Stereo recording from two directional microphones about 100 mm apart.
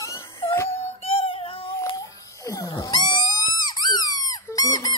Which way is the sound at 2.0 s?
35° left (ahead or behind).